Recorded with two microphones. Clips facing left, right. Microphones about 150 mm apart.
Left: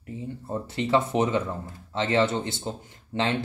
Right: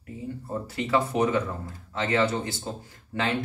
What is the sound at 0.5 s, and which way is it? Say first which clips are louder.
Speech: left 2 dB; 25° left (ahead or behind).